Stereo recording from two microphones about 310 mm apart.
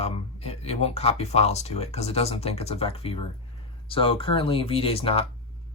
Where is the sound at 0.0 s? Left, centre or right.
Centre.